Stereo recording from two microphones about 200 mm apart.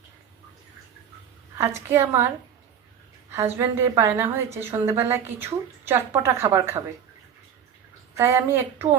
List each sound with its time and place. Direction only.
1.5 s a woman's voice: 15° right (ahead or behind)
3.3 s a woman's voice: 10° right (ahead or behind)
8.1 s a woman's voice: 15° right (ahead or behind)